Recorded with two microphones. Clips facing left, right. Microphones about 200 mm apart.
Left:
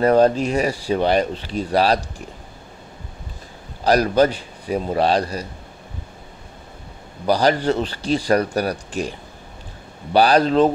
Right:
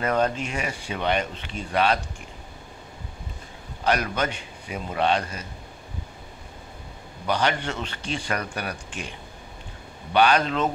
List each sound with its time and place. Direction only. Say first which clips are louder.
0.0 s speech: left 9 dB; 35° left (ahead or behind)
3.8 s speech: left 9 dB; 35° left (ahead or behind)
7.2 s speech: left 8 dB; 35° left (ahead or behind)
10.1 s speech: left 6 dB; 35° left (ahead or behind)